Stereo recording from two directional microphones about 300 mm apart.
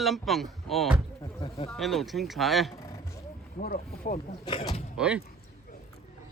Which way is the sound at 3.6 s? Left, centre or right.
Left.